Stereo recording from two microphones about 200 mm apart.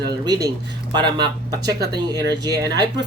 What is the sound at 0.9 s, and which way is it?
Speech, 20° right (ahead or behind).